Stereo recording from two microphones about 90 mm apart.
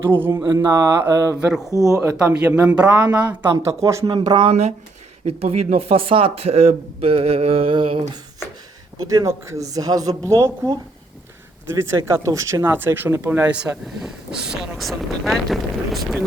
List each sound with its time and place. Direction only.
0.1 s speech: 25° right (ahead or behind)
0.4 s speech: 45° right (ahead or behind)
1.4 s speech: 5° right (ahead or behind)
1.7 s speech: 40° right (ahead or behind)
2.4 s speech: 15° right (ahead or behind)
3.5 s speech: 35° right (ahead or behind)
4.0 s speech: 50° right (ahead or behind)
5.4 s speech: 90° right; by 8.0 s 70° right (ahead or behind)
9.0 s speech: 35° right (ahead or behind)
10.2 s speech: 30° right (ahead or behind)
11.7 s speech: 30° right (ahead or behind)
12.7 s speech: 25° right (ahead or behind)
13.8 s speech: 5° right (ahead or behind)